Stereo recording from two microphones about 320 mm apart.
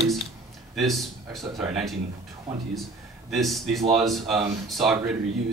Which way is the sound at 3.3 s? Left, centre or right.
Centre.